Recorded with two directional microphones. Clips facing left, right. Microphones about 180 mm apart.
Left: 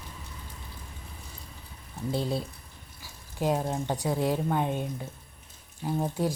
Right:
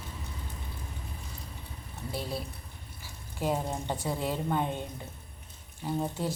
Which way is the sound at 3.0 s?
15° left (ahead or behind).